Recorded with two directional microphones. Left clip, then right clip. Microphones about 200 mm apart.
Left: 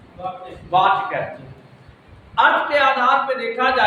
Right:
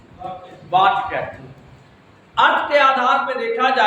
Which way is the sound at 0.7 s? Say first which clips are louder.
Right 1 dB; 20° right (ahead or behind).